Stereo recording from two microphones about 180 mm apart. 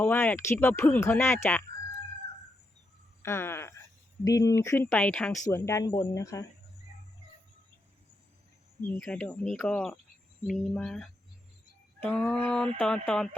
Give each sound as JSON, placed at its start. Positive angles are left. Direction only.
{"t": 0.0, "sound": "speech", "side_deg": 10}
{"t": 3.2, "sound": "speech", "side_deg": 15}
{"t": 9.0, "sound": "speech", "side_deg": 10}
{"t": 10.4, "sound": "a sound", "side_deg": 0}